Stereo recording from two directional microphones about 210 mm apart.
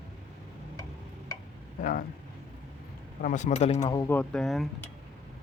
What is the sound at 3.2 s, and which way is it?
Speech, 35° left (ahead or behind).